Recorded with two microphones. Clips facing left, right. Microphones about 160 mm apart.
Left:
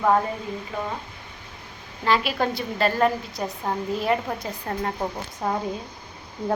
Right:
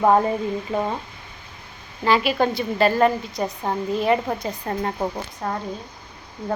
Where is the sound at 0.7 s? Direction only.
25° right (ahead or behind).